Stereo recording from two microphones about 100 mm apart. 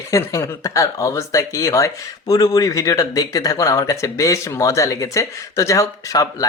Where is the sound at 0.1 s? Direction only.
30° left (ahead or behind).